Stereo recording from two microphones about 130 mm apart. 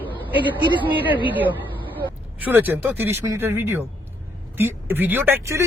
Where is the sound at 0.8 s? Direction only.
15° right (ahead or behind).